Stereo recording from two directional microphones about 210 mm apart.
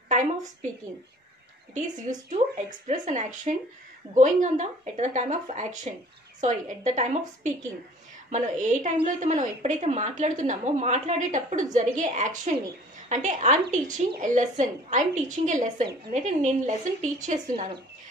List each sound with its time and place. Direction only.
1.7 s a woman's voice: 35° right (ahead or behind)